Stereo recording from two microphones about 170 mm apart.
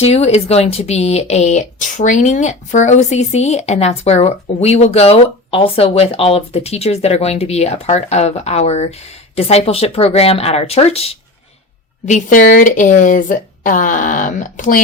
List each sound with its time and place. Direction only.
0.0 s speech: 35° left (ahead or behind)
12.0 s speech: 50° left (ahead or behind)